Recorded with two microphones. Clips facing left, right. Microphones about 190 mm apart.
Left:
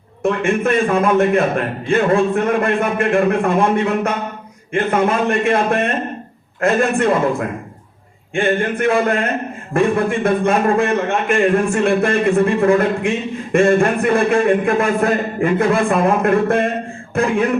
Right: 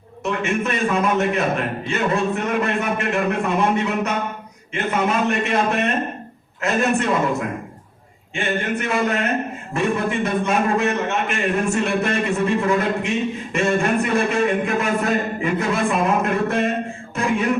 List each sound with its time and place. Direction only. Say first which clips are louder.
0.2 s a man's voice: left 5 dB; 50° left (ahead or behind)
8.4 s a man's voice: left 6 dB; 50° left (ahead or behind)
17.2 s a sound: left 6 dB; 55° left (ahead or behind)